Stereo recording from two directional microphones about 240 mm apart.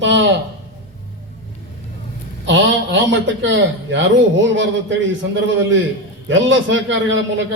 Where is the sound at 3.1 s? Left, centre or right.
Right.